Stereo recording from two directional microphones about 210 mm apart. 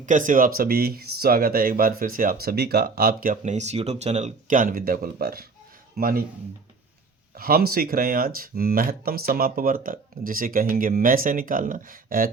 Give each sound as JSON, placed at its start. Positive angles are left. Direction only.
{"t": 0.0, "sound": "speech", "side_deg": -35}
{"t": 7.3, "sound": "speech", "side_deg": -45}